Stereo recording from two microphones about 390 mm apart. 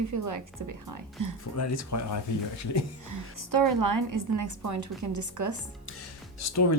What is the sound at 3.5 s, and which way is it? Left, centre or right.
A woman's voice, right.